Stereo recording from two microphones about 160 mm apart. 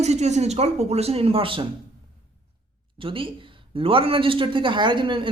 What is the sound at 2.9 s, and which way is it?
A woman's voice, 35° right (ahead or behind).